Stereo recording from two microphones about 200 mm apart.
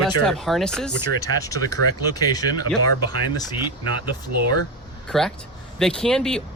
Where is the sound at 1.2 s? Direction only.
15° left (ahead or behind).